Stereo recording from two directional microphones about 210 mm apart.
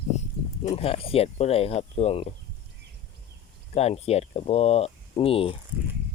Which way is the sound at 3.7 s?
30° left (ahead or behind).